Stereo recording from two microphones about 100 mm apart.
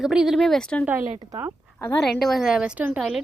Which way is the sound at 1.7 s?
20° left (ahead or behind).